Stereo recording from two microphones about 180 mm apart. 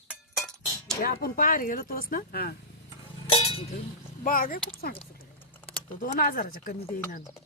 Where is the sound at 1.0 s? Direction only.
55° left (ahead or behind).